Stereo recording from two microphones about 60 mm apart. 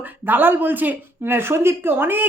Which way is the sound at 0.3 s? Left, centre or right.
Right.